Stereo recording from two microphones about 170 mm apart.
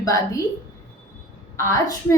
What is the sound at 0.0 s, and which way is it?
Speech, 20° left (ahead or behind).